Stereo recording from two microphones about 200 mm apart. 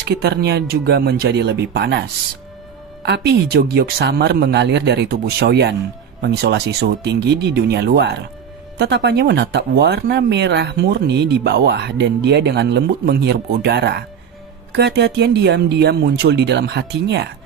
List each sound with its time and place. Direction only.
0.0 s speech: 55° right (ahead or behind)